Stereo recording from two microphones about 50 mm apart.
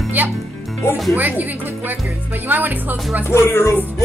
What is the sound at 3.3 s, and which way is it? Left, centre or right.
Music, left.